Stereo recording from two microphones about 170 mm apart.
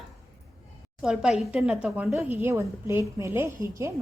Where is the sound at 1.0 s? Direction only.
5° right (ahead or behind).